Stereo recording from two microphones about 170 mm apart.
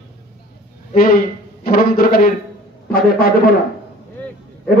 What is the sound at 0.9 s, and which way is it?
A man's voice, 60° left (ahead or behind).